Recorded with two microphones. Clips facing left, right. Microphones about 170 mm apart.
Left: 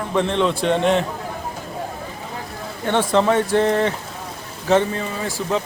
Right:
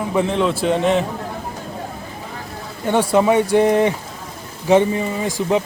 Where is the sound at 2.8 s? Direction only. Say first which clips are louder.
Right 2 dB; 10° right (ahead or behind).